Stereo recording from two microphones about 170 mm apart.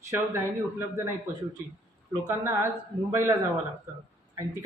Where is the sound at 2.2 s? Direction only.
15° right (ahead or behind).